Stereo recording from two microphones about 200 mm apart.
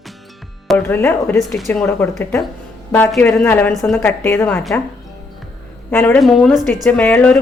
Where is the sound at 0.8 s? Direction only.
10° left (ahead or behind).